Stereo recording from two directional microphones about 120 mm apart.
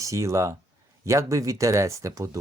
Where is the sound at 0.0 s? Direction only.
25° right (ahead or behind).